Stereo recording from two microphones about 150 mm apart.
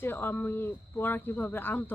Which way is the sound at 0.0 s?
15° left (ahead or behind).